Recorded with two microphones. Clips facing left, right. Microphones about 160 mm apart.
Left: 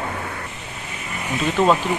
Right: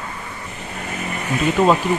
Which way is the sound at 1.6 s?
5° right (ahead or behind).